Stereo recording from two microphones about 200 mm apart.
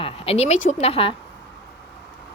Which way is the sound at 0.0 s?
30° left (ahead or behind).